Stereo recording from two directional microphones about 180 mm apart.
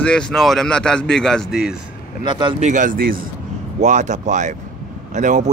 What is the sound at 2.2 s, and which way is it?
Speech, 25° right (ahead or behind).